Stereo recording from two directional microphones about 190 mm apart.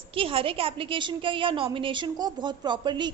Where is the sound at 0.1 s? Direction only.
30° right (ahead or behind).